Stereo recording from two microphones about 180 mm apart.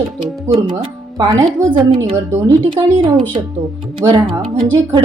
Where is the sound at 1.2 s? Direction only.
25° right (ahead or behind).